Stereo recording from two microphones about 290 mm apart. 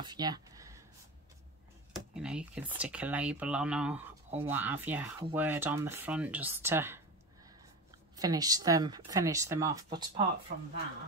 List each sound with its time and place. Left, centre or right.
0.0 s a sound: centre
2.1 s speech: centre
8.2 s speech: centre
10.5 s speech: right